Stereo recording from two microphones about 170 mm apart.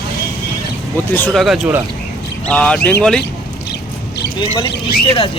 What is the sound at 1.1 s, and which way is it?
Speech, 10° left (ahead or behind).